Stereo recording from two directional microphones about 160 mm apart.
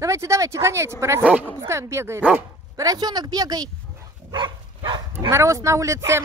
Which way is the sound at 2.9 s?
25° right (ahead or behind).